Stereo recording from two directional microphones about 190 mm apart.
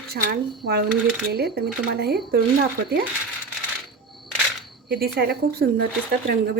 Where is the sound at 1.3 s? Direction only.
55° right (ahead or behind).